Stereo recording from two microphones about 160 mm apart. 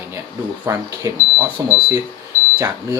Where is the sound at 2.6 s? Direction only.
20° right (ahead or behind).